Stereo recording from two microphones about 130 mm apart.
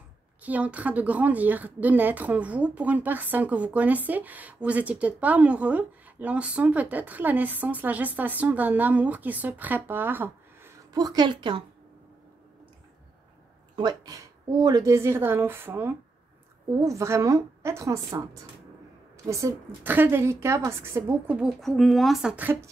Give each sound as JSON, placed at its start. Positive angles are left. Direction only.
{"t": 0.4, "sound": "a woman's voice", "side_deg": -10}
{"t": 10.9, "sound": "a woman's voice", "side_deg": -30}
{"t": 13.7, "sound": "a woman's voice", "side_deg": -30}
{"t": 21.4, "sound": "speech", "side_deg": 0}